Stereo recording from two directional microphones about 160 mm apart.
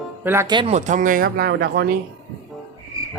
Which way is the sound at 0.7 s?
55° right (ahead or behind).